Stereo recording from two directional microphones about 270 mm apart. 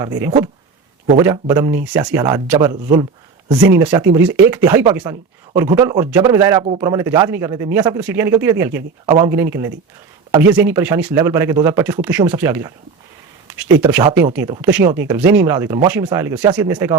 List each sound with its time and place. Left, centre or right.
0.0 s speech: centre